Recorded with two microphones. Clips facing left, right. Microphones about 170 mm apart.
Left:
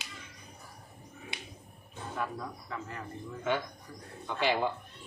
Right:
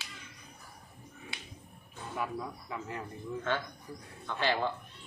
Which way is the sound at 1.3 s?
20° left (ahead or behind).